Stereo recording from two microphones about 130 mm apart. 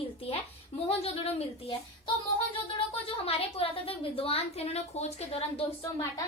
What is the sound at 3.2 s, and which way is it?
A woman's voice, 45° left (ahead or behind).